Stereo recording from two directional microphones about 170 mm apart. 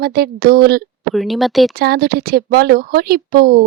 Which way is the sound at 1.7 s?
65° right (ahead or behind).